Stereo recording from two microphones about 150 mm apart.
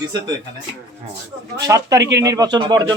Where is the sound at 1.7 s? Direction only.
20° right (ahead or behind).